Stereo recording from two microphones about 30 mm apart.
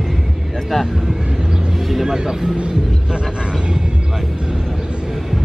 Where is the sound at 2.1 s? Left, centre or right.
Centre.